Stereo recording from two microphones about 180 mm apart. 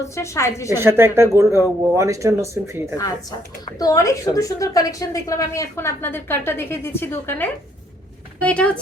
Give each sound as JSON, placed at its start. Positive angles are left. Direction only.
{"t": 0.0, "sound": "a woman's voice", "side_deg": 15}
{"t": 0.7, "sound": "speech", "side_deg": -15}
{"t": 3.8, "sound": "a woman's voice", "side_deg": 20}